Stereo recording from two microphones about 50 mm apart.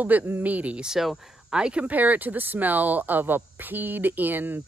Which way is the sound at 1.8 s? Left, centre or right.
Right.